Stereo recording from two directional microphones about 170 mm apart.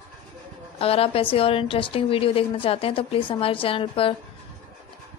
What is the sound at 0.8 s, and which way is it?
A woman's voice, 35° left (ahead or behind).